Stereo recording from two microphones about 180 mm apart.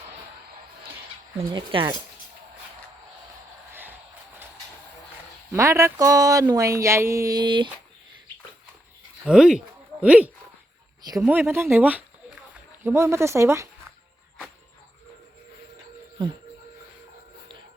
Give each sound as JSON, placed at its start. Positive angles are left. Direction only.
{"t": 1.4, "sound": "speech", "side_deg": -25}
{"t": 3.7, "sound": "a sound", "side_deg": -10}
{"t": 5.5, "sound": "speech", "side_deg": -15}
{"t": 9.2, "sound": "speech", "side_deg": -5}